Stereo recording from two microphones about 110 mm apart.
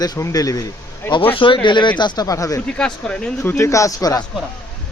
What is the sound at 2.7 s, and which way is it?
Speech, 10° left (ahead or behind).